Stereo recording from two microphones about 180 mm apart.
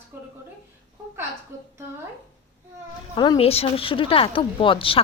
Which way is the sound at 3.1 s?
25° left (ahead or behind).